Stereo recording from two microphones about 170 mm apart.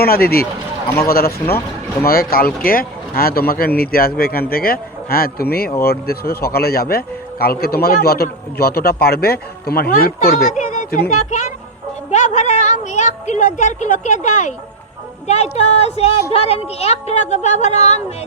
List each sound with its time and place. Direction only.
0.0 s a woman's voice: 65° left (ahead or behind); by 18.0 s 40° left (ahead or behind)